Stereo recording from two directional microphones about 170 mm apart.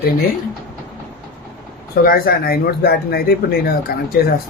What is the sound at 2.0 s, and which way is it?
Speech, 60° left (ahead or behind).